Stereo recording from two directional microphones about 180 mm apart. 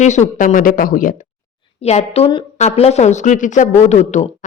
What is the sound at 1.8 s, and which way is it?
A woman's voice, 35° left (ahead or behind).